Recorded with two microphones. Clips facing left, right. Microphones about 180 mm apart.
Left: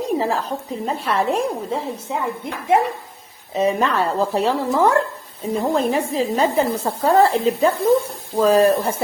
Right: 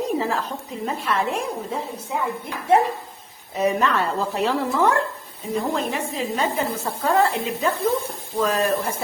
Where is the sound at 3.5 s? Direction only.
30° left (ahead or behind).